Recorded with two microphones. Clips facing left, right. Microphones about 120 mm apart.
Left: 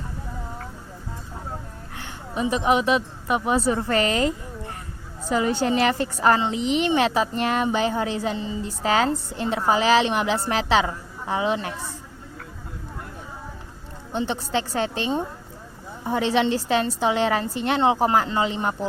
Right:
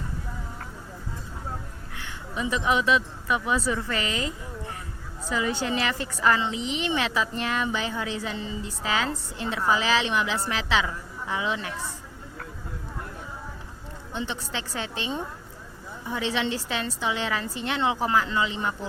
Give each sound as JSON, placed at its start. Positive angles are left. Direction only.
{"t": 2.0, "sound": "a woman's voice", "side_deg": 35}
{"t": 14.1, "sound": "a woman's voice", "side_deg": 45}